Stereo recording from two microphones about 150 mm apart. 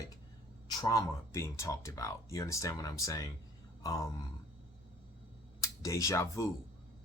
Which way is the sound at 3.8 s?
25° left (ahead or behind).